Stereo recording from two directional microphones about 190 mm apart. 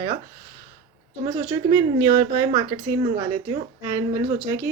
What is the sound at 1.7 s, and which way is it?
Speech, 20° right (ahead or behind).